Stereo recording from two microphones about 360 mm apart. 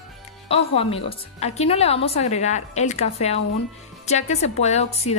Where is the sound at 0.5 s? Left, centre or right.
Centre.